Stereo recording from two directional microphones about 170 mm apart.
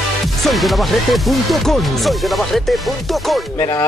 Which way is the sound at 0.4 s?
Centre (ahead or behind).